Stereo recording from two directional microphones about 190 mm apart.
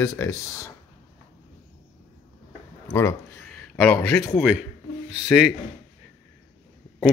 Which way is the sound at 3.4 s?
5° left (ahead or behind).